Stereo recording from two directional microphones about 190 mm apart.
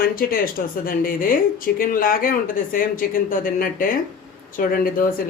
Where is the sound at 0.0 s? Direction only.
50° left (ahead or behind).